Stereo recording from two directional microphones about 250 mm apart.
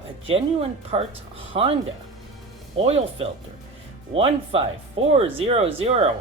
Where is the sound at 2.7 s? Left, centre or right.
Right.